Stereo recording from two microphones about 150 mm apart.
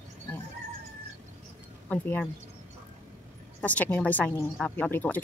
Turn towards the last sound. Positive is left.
turn(degrees=10)  # may be behind; listen again after turning